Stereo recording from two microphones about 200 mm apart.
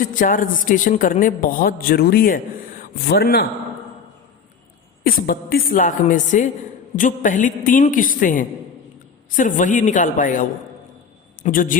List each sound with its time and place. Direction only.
0.0 s a woman's voice: 40° left (ahead or behind)
5.0 s a woman's voice: 50° left (ahead or behind)